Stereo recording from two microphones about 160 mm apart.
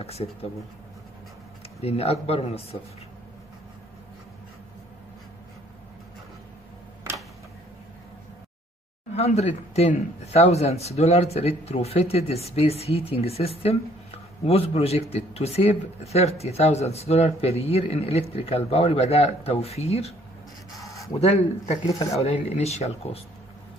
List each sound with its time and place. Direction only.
0.0 s speech: 40° left (ahead or behind)
1.8 s speech: 40° left (ahead or behind)
9.1 s speech: 40° left (ahead or behind)
21.8 s speech: 20° left (ahead or behind)
22.1 s speech: 40° left (ahead or behind)